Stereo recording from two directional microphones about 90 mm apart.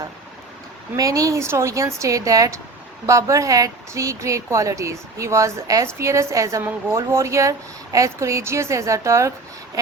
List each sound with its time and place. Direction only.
0.9 s speech: 40° right (ahead or behind)